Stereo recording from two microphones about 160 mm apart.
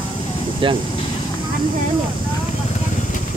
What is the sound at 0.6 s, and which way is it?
Speech, 30° right (ahead or behind).